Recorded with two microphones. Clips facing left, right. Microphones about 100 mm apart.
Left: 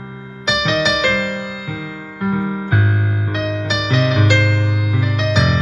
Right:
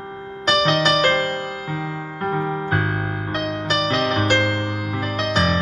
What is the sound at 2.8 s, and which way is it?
Music, 5° left (ahead or behind).